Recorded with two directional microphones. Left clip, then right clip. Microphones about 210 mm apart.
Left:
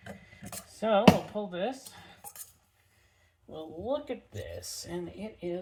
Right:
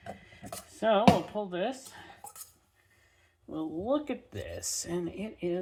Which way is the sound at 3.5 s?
30° right (ahead or behind).